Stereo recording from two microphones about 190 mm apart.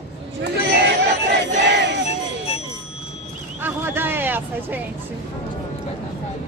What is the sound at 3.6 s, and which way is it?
Speech, 10° right (ahead or behind).